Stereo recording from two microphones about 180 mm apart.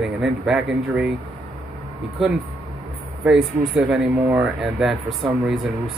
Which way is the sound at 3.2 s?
5° right (ahead or behind).